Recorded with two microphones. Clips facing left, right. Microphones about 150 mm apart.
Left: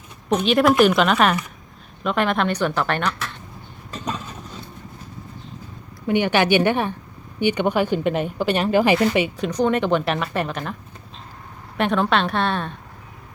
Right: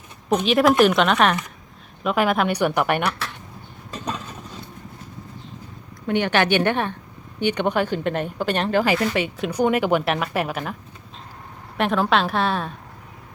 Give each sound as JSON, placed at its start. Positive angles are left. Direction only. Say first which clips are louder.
{"t": 0.3, "sound": "a woman's voice", "louder": "even", "side_deg": 0}
{"t": 6.1, "sound": "speech", "louder": "left 2 dB", "side_deg": 10}
{"t": 8.8, "sound": "speech", "louder": "left 3 dB", "side_deg": 20}
{"t": 9.5, "sound": "a woman's voice", "louder": "right 1 dB", "side_deg": -10}
{"t": 11.8, "sound": "a woman's voice", "louder": "even", "side_deg": 0}